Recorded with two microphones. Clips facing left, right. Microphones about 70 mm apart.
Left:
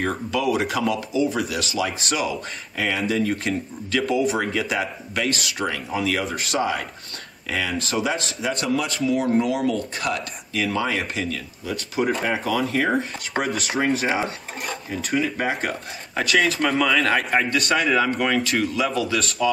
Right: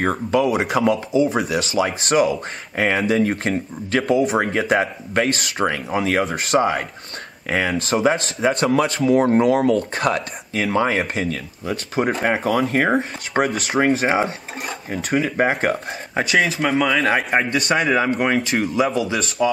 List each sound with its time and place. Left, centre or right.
0.0 s speech: right
4.1 s speech: right
16.5 s speech: centre
17.3 s a man's voice: right